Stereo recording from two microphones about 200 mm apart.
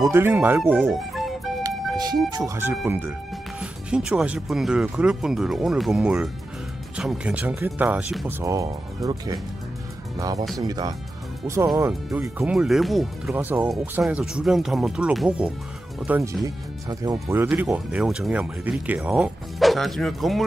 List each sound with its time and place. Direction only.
0.0 s speech: 10° right (ahead or behind)
1.6 s music: 20° right (ahead or behind)
2.3 s speech: 15° right (ahead or behind)
8.4 s speech: 15° right (ahead or behind)
12.1 s speech: 5° right (ahead or behind)
17.0 s speech: 15° right (ahead or behind); by 20.4 s centre (ahead or behind)